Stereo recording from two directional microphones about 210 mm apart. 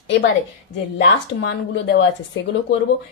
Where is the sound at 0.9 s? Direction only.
60° left (ahead or behind).